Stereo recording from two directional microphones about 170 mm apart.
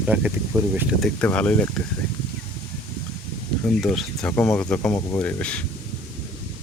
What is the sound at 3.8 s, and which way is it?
Speech, centre (ahead or behind).